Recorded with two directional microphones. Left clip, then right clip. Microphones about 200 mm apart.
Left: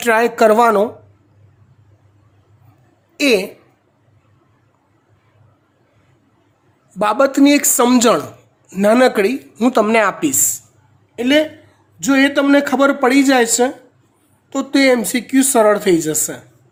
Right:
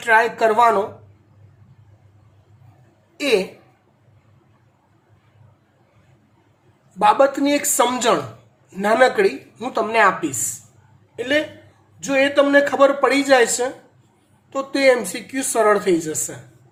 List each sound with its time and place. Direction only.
0.0 s speech: 60° left (ahead or behind)
3.2 s speech: 55° left (ahead or behind)
7.0 s speech: 55° left (ahead or behind)